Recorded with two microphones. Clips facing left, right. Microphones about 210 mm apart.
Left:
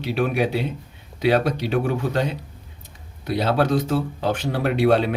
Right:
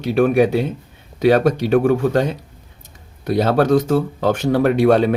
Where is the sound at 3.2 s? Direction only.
45° right (ahead or behind).